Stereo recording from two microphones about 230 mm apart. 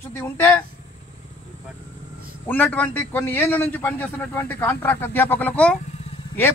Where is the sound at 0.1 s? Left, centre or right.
Centre.